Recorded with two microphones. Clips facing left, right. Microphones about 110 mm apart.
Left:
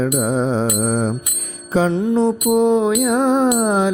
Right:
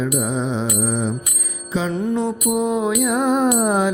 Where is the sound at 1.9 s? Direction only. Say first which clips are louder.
Left 3 dB; 30° left (ahead or behind).